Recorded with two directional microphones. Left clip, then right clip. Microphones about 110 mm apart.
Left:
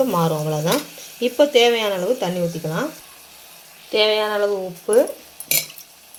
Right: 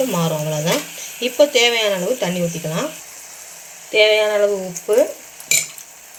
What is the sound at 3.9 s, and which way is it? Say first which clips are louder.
Speech: right 4 dB; 15° left (ahead or behind).